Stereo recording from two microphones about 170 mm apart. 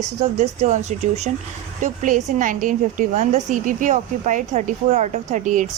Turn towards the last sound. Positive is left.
turn(degrees=-45)  # may be behind; listen again after turning